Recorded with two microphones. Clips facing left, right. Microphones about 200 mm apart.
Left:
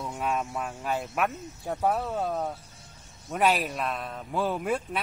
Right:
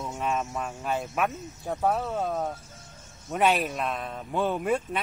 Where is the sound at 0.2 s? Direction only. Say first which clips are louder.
Even; 5° left (ahead or behind).